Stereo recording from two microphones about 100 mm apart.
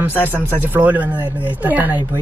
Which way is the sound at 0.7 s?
15° right (ahead or behind).